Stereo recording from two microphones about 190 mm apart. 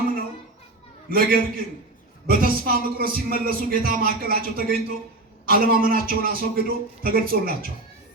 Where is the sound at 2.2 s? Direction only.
50° right (ahead or behind).